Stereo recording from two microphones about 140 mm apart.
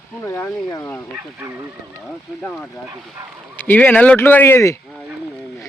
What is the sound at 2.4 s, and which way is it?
Speech, 5° left (ahead or behind).